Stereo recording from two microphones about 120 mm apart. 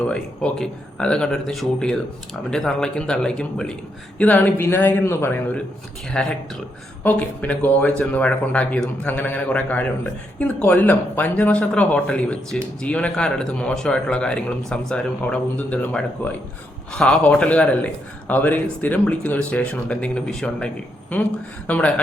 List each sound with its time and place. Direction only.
0.1 s a man's voice: 5° left (ahead or behind)
21.7 s speech: 10° left (ahead or behind)